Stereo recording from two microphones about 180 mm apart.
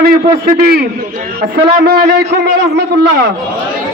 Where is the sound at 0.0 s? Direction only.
55° right (ahead or behind).